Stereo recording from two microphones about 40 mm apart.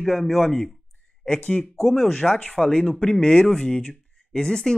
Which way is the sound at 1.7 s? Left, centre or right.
Centre.